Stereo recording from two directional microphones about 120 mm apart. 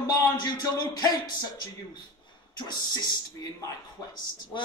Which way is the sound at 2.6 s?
35° left (ahead or behind).